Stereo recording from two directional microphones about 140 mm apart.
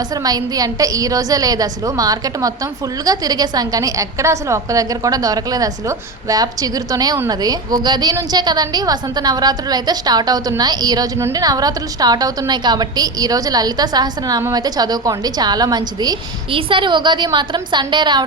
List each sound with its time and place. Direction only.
0.1 s a woman's voice: 30° right (ahead or behind)